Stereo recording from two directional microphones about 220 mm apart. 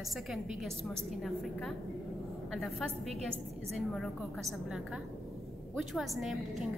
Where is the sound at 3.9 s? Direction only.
Centre (ahead or behind).